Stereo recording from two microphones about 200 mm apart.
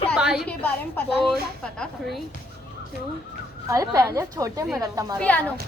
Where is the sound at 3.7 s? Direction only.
15° right (ahead or behind).